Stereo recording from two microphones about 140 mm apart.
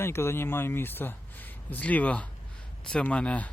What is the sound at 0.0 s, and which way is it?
A man's voice, 15° left (ahead or behind).